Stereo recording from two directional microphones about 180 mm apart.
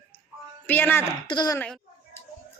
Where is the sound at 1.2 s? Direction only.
25° left (ahead or behind).